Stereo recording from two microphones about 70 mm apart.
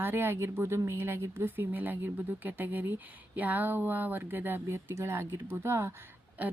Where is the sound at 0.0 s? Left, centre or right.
Right.